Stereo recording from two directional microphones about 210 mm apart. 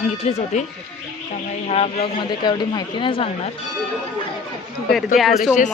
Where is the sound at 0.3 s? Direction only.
30° left (ahead or behind).